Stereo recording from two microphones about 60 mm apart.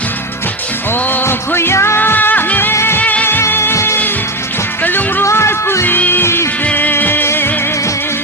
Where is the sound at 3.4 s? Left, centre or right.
Left.